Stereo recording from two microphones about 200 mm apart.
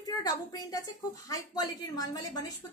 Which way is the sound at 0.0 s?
20° left (ahead or behind).